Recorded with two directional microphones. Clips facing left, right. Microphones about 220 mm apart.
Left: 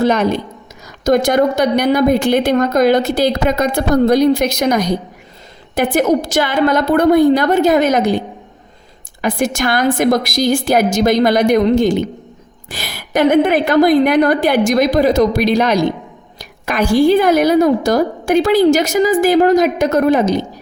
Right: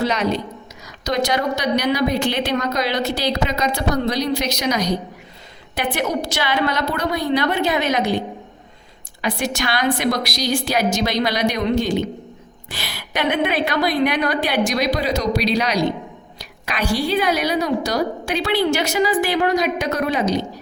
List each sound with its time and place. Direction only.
0.0 s a woman's voice: 50° left (ahead or behind)
9.2 s a woman's voice: 50° left (ahead or behind)